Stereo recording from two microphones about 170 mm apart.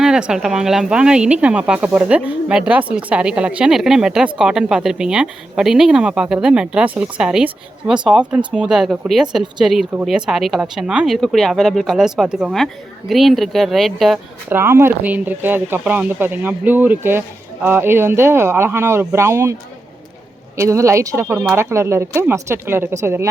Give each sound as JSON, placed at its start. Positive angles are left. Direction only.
{"t": 0.0, "sound": "a woman's voice", "side_deg": -5}
{"t": 14.5, "sound": "speech", "side_deg": -15}
{"t": 20.6, "sound": "speech", "side_deg": -15}